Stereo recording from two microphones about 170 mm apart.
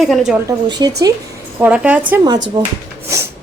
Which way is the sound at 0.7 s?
25° right (ahead or behind).